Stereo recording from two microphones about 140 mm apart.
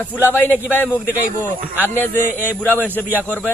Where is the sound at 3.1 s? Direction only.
10° right (ahead or behind).